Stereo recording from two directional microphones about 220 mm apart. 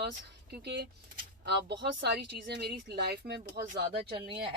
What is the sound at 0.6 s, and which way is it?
Speech, 50° right (ahead or behind).